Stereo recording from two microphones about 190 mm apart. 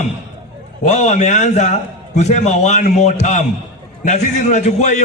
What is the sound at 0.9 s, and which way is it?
A man's voice, 40° left (ahead or behind).